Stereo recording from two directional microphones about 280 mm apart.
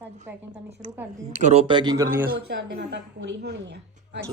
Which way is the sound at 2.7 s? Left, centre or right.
Right.